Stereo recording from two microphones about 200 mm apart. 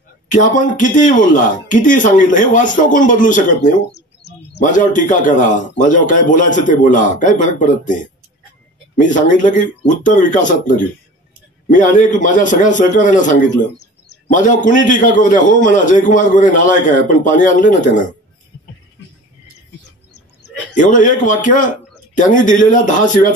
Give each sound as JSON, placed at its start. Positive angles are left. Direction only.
{"t": 0.3, "sound": "a man's voice", "side_deg": 40}
{"t": 20.7, "sound": "a man's voice", "side_deg": 40}